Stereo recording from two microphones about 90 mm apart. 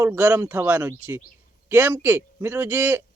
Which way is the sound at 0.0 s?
20° right (ahead or behind).